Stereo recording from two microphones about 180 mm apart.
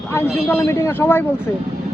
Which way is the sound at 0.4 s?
15° left (ahead or behind).